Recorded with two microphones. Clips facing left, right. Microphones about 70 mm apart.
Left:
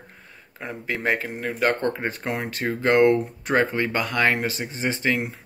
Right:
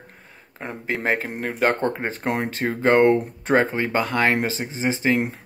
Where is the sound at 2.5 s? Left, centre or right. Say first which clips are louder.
Right 1 dB; right.